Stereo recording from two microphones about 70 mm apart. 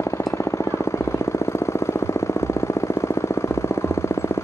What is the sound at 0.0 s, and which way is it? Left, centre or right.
Jackhammer, left.